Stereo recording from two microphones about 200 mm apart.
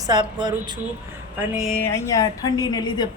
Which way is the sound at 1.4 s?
5° right (ahead or behind).